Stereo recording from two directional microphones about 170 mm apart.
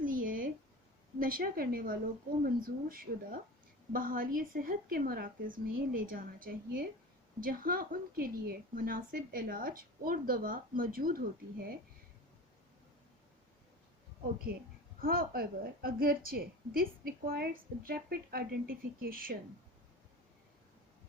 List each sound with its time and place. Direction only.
0.0 s a sound: 55° right (ahead or behind)
1.2 s a woman's voice: 60° right (ahead or behind)
14.5 s a woman's voice: 60° right (ahead or behind)